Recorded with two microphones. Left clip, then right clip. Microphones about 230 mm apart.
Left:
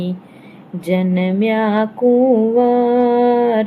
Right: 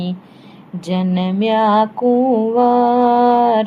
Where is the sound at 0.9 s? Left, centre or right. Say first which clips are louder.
Left 3 dB; right.